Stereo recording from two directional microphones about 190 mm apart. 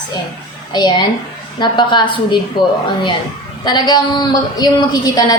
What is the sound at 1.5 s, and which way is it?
Speech, 25° left (ahead or behind).